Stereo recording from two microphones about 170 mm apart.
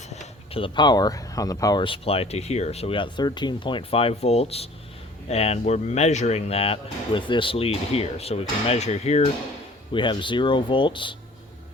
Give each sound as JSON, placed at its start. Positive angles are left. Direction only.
{"t": 0.1, "sound": "speech", "side_deg": 35}
{"t": 9.9, "sound": "speech", "side_deg": 30}